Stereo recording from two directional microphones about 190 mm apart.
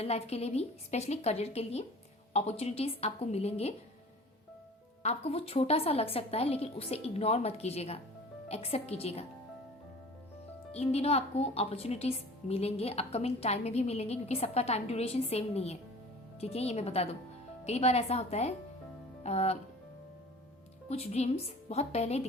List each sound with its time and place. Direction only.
0.0 s a woman's voice: 30° left (ahead or behind)
5.0 s a woman's voice: 35° left (ahead or behind)
10.7 s a woman's voice: 35° left (ahead or behind)
20.9 s a woman's voice: 35° left (ahead or behind)